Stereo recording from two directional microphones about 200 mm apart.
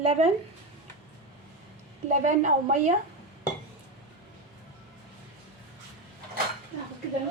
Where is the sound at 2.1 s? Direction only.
35° right (ahead or behind).